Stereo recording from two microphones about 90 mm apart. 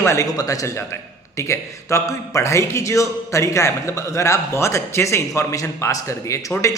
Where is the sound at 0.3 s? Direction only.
40° left (ahead or behind).